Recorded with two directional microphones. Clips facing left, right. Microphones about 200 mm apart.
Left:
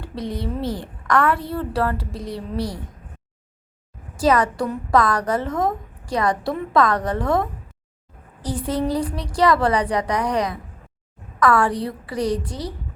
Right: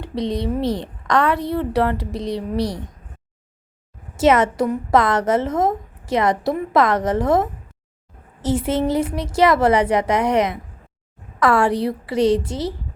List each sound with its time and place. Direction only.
0.0 s a woman's voice: 20° right (ahead or behind)
4.2 s a woman's voice: 25° right (ahead or behind)